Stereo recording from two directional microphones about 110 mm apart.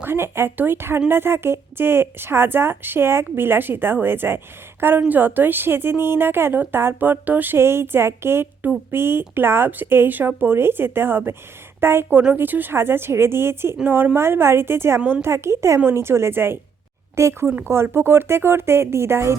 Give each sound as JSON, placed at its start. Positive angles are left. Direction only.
{"t": 0.0, "sound": "a woman's voice", "side_deg": -20}